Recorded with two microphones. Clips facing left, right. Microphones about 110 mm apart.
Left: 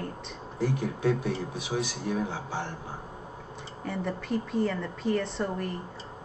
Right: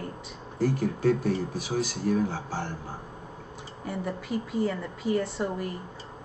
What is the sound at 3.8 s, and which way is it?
Speech, 5° right (ahead or behind).